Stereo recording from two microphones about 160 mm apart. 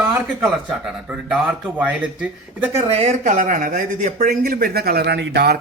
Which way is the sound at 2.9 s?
40° right (ahead or behind).